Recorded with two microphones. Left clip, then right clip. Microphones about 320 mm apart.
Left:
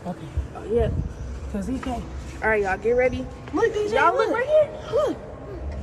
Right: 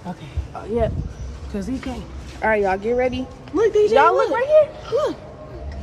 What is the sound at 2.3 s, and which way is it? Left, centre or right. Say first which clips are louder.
Speech: right 3 dB; right.